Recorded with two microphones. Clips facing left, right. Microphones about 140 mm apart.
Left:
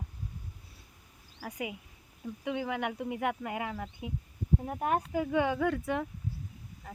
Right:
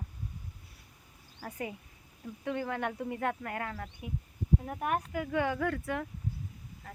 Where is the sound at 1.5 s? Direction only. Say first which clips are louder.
Left 1 dB; 15° left (ahead or behind).